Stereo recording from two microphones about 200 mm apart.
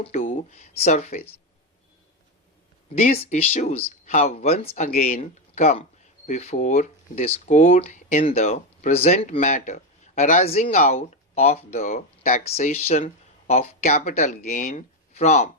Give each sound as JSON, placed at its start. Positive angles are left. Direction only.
{"t": 0.1, "sound": "speech", "side_deg": 40}
{"t": 3.1, "sound": "speech", "side_deg": 30}